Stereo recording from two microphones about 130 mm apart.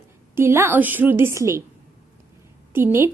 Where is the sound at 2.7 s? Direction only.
20° right (ahead or behind).